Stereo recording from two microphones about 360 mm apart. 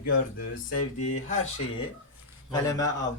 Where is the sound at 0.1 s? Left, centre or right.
Left.